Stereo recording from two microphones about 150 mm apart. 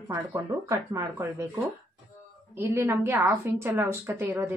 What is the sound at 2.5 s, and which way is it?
A woman's voice, 15° right (ahead or behind).